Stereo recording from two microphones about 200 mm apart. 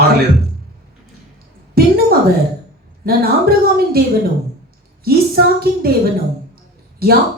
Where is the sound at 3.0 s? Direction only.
50° right (ahead or behind).